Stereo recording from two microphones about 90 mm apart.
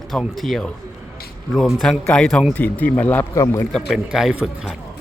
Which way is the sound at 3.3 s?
40° left (ahead or behind).